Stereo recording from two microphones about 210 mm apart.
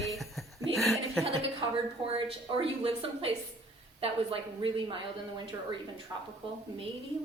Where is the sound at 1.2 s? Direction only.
25° right (ahead or behind).